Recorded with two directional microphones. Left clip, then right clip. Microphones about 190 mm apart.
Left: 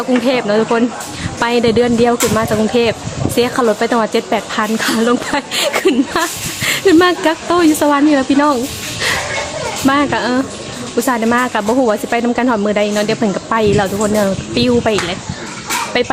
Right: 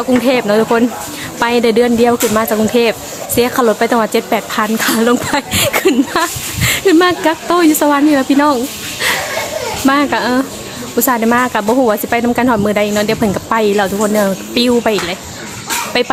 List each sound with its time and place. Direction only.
0.1 s speech: 10° right (ahead or behind)
9.8 s speech: centre (ahead or behind)